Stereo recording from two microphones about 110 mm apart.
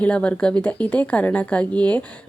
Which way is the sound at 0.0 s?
10° left (ahead or behind).